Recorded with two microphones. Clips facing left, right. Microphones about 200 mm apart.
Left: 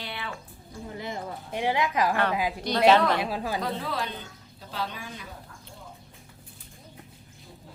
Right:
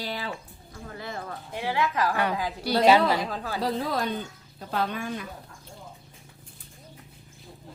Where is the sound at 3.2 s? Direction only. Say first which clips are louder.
Left 2 dB; 10° left (ahead or behind).